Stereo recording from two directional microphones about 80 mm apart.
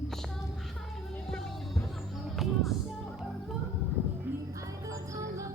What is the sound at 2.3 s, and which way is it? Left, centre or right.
Music, centre.